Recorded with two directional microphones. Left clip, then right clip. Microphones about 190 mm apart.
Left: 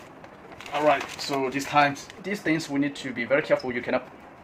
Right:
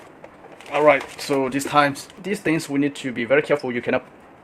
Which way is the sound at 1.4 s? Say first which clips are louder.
Right 3 dB; 65° right (ahead or behind).